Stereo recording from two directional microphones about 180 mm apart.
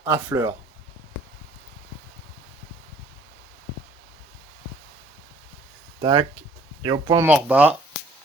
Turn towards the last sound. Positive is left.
turn(degrees=-10)  # may be behind; listen again after turning